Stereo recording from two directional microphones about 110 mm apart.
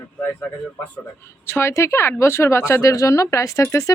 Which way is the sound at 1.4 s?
25° left (ahead or behind).